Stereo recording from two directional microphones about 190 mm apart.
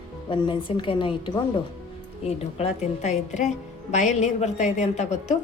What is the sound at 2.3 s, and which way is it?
A woman's voice, 35° left (ahead or behind).